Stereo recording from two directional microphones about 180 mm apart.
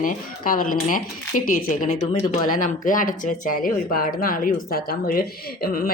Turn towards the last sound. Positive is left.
turn(degrees=55)  # may be behind; listen again after turning